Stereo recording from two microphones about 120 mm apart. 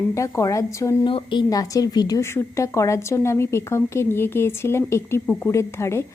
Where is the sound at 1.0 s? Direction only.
45° left (ahead or behind).